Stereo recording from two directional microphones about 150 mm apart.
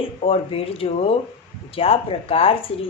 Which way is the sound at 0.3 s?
40° left (ahead or behind).